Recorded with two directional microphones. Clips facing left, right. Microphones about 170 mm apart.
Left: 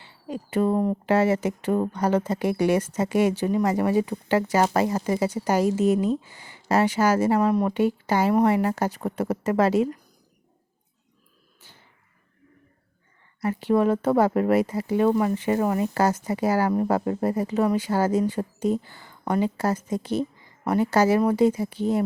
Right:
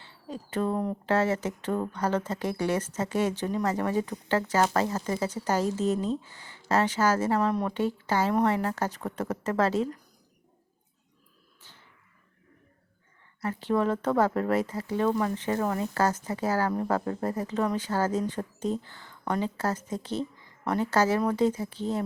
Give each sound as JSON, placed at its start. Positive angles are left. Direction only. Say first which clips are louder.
{"t": 0.0, "sound": "speech", "louder": "left 5 dB", "side_deg": 10}
{"t": 11.6, "sound": "a sound", "louder": "left 2 dB", "side_deg": 10}
{"t": 13.4, "sound": "speech", "louder": "left 5 dB", "side_deg": 10}